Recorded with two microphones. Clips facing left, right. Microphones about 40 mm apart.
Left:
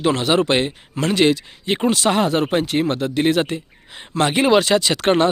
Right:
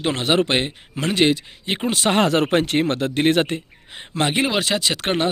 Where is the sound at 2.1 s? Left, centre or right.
Right.